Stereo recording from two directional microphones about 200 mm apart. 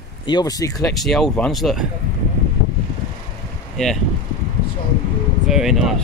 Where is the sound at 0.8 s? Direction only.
Centre (ahead or behind).